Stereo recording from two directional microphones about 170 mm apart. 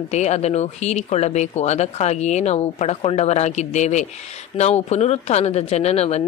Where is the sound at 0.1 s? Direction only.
40° left (ahead or behind).